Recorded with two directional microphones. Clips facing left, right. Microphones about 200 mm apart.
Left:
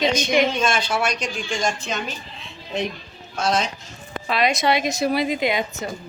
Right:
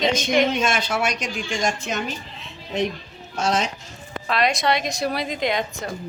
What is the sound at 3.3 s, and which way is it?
Speech, 40° right (ahead or behind).